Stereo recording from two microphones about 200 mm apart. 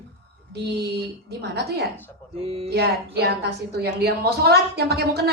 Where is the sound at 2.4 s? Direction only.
30° right (ahead or behind).